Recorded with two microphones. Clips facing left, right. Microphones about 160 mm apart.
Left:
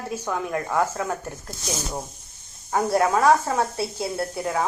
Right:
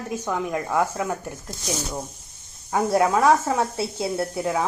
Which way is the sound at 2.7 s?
20° right (ahead or behind).